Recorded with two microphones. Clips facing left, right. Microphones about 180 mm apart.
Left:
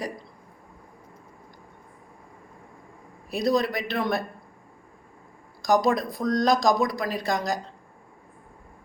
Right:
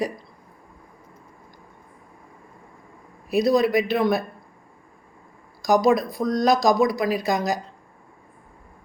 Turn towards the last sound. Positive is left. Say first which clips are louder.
# right 4 dB
turn(degrees=-5)  # may be behind; listen again after turning